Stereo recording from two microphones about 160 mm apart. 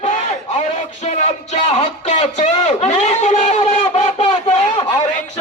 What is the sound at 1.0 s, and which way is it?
Speech, 40° left (ahead or behind).